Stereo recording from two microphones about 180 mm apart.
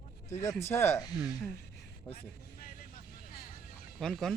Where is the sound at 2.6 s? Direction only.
50° left (ahead or behind).